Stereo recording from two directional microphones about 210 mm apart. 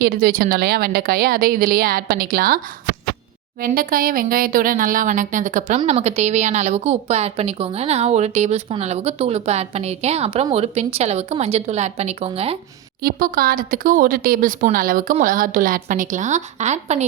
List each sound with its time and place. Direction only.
0.0 s a woman's voice: 45° right (ahead or behind)
3.6 s speech: 40° right (ahead or behind)
13.0 s speech: 45° right (ahead or behind)